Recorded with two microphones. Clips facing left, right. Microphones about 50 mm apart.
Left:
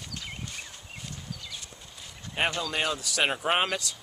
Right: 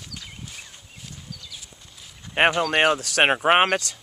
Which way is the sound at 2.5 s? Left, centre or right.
Right.